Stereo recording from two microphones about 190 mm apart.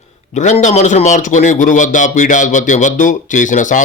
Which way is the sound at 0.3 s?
40° left (ahead or behind).